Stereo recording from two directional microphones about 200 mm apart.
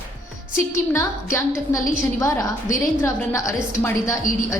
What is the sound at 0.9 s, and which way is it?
A woman's voice, 15° left (ahead or behind).